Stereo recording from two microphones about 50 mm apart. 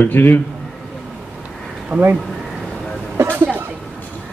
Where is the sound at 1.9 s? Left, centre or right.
Right.